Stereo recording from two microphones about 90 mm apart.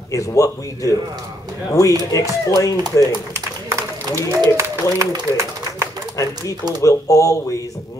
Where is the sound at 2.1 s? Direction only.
40° left (ahead or behind).